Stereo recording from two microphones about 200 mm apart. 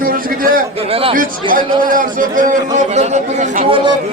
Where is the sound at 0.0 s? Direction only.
45° right (ahead or behind).